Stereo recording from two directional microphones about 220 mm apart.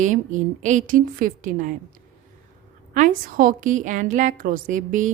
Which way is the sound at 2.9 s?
35° right (ahead or behind).